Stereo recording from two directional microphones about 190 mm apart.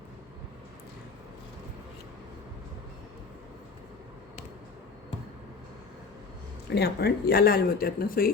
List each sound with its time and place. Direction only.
6.7 s speech: 60° left (ahead or behind)